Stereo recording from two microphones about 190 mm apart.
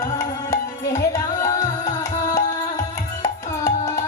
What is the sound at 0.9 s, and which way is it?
Music, 15° left (ahead or behind).